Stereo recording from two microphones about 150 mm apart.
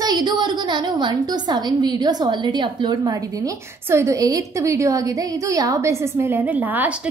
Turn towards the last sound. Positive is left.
turn(degrees=-10)  # may be behind; listen again after turning